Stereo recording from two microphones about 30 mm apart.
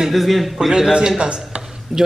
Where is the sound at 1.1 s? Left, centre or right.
Right.